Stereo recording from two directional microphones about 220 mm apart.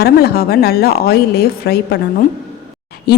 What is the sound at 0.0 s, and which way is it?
Speech, 45° left (ahead or behind).